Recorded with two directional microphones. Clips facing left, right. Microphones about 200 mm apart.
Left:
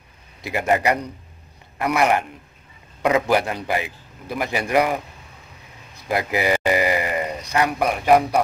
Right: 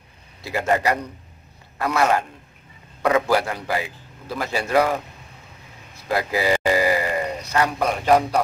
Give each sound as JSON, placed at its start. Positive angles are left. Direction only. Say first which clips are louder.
{"t": 0.4, "sound": "a man's voice", "louder": "left 1 dB", "side_deg": 20}
{"t": 1.8, "sound": "a man's voice", "louder": "left 1 dB", "side_deg": 15}
{"t": 6.0, "sound": "a man's voice", "louder": "even", "side_deg": 20}
{"t": 6.6, "sound": "grunt", "louder": "even", "side_deg": 20}
{"t": 7.5, "sound": "speech", "louder": "left 1 dB", "side_deg": 15}